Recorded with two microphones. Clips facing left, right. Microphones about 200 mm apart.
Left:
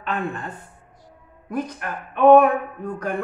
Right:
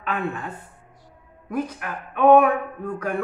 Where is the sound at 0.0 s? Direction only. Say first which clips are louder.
Even; 5° right (ahead or behind).